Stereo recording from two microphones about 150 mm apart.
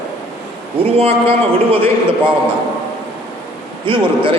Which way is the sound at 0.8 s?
40° right (ahead or behind).